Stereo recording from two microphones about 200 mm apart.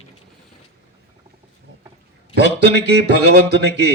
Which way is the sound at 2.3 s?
55° right (ahead or behind).